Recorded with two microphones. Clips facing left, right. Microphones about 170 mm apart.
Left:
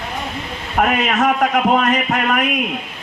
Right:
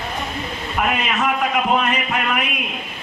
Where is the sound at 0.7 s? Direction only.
50° left (ahead or behind).